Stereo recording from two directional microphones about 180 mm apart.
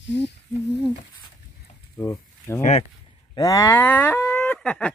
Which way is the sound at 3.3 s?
20° left (ahead or behind).